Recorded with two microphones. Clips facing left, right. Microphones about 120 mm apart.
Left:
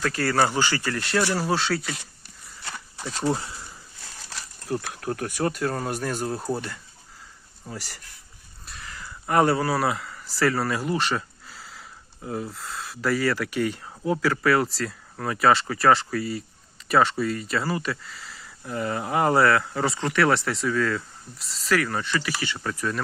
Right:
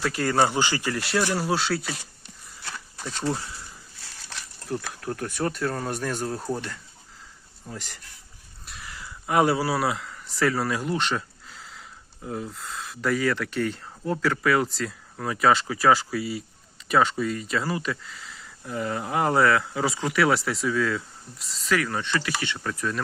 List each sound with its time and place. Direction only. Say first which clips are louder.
0.0 s speech: even; 15° right (ahead or behind)
1.3 s speech: left 1 dB; centre (ahead or behind)
3.0 s speech: left 2 dB; 5° left (ahead or behind)
3.2 s speech: left 3 dB; 25° left (ahead or behind)
4.7 s speech: left 2 dB; 10° left (ahead or behind)
8.6 s a sound: left 1 dB; centre (ahead or behind)
8.9 s speech: left 1 dB; 10° right (ahead or behind)